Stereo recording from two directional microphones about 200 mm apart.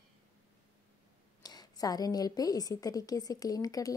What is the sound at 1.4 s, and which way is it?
A woman's voice, 20° left (ahead or behind).